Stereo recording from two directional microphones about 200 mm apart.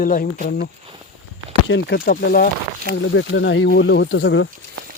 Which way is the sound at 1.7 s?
60° left (ahead or behind).